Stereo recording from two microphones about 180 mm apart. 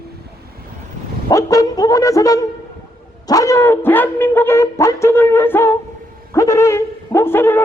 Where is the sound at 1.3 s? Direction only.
20° left (ahead or behind).